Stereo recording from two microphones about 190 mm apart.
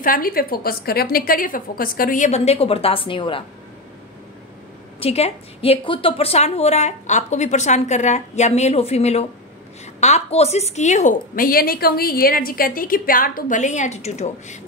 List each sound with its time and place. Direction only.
0.0 s a woman's voice: 50° left (ahead or behind); by 3.4 s 25° left (ahead or behind)
5.0 s a woman's voice: 30° left (ahead or behind)